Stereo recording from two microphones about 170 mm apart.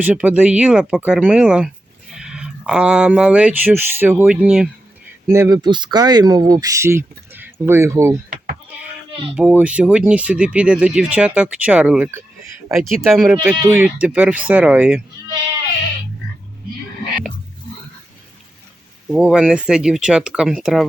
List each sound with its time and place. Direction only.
0.0 s speech: 10° right (ahead or behind)
5.3 s speech: 20° right (ahead or behind)
8.3 s sheep: 55° right (ahead or behind)
9.3 s speech: 5° right (ahead or behind)
13.6 s speech: 15° right (ahead or behind)
19.0 s speech: 5° right (ahead or behind)